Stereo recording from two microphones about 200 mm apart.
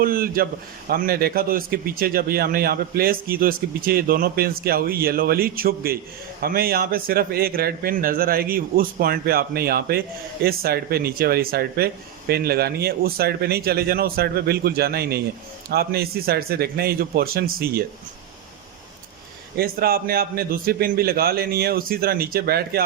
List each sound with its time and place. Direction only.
0.0 s speech: 45° right (ahead or behind)
19.5 s speech: 50° right (ahead or behind)